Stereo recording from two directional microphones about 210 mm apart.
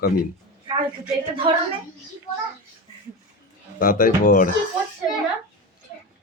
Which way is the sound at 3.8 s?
40° left (ahead or behind).